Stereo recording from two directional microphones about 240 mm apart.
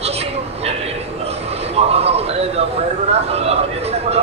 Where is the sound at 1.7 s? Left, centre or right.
Right.